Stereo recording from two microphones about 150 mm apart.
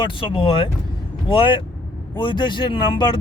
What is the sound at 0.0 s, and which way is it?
Speech, 35° left (ahead or behind).